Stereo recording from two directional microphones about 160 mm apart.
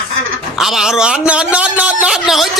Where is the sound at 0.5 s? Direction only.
Centre (ahead or behind).